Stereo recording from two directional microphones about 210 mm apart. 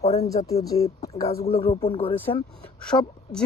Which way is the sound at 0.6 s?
15° left (ahead or behind).